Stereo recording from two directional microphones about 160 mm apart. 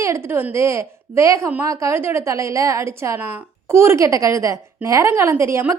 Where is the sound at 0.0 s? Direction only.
15° right (ahead or behind).